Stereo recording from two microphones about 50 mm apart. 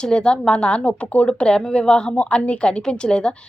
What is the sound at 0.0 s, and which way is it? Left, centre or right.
A woman's voice, centre.